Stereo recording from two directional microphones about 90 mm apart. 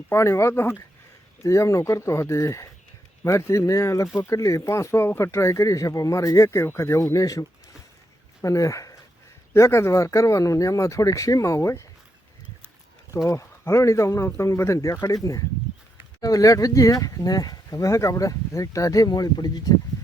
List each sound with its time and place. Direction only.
0.1 s speech: 30° left (ahead or behind)
13.2 s speech: 30° left (ahead or behind)